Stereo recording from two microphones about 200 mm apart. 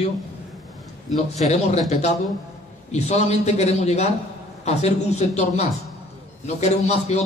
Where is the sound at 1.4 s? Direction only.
35° left (ahead or behind).